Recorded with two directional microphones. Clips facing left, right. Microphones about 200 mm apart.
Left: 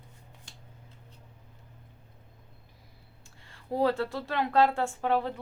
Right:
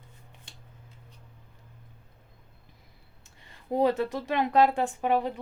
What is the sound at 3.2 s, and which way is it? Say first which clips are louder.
Speech: right 2 dB; 20° right (ahead or behind).